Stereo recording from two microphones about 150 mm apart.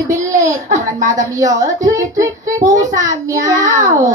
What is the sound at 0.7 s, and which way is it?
Speech, 20° right (ahead or behind).